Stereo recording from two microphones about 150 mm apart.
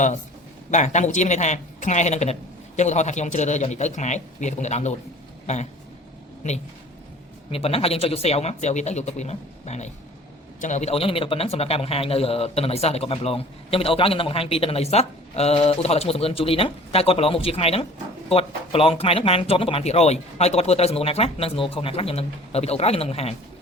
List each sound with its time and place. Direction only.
0.7 s speech: 55° left (ahead or behind)
7.5 s a man's voice: 40° left (ahead or behind)